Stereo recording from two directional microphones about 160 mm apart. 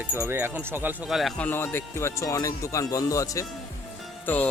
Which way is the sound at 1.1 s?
Centre (ahead or behind).